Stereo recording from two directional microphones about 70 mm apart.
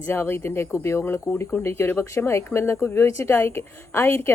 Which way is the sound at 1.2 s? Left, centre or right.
Left.